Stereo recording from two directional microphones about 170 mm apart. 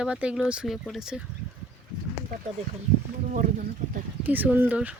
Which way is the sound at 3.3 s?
45° right (ahead or behind).